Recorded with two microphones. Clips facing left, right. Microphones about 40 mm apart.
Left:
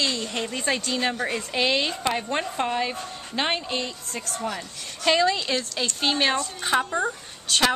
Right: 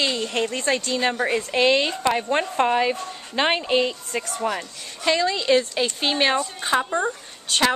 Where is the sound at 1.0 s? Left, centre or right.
Centre.